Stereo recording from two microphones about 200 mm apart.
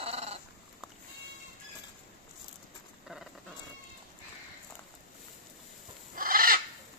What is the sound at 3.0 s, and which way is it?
Horse, centre (ahead or behind).